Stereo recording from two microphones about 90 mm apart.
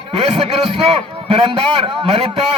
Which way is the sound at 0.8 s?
90° right.